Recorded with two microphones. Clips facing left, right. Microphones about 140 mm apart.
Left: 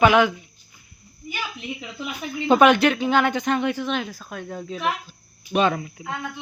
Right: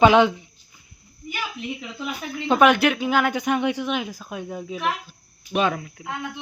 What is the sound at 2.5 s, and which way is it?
Speech, centre (ahead or behind).